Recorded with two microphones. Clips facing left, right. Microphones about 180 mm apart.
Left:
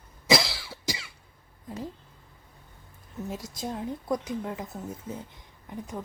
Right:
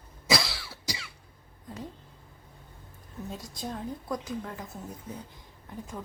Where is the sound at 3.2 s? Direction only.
25° left (ahead or behind).